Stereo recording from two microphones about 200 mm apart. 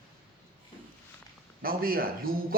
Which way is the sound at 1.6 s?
45° right (ahead or behind).